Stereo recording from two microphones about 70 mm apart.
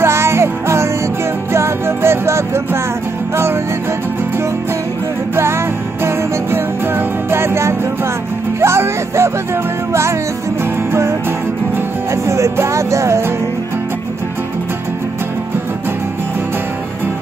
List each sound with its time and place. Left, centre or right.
0.0 s music: right
5.3 s music: right
10.6 s music: right